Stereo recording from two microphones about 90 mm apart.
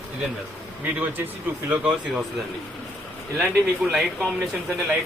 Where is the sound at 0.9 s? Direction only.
20° right (ahead or behind).